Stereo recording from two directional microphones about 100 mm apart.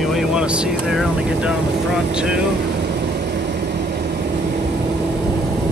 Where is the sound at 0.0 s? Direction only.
Centre (ahead or behind).